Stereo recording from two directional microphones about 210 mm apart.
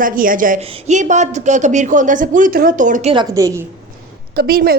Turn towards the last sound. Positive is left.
turn(degrees=-45)  # may be behind; listen again after turning